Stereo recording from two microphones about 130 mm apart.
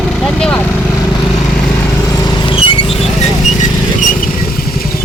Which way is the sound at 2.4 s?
40° left (ahead or behind).